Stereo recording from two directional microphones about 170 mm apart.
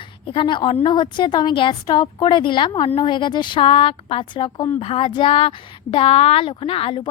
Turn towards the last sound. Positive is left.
turn(degrees=35)  # may be behind; listen again after turning